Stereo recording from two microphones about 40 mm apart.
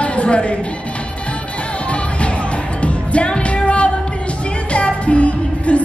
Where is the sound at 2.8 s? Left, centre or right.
Left.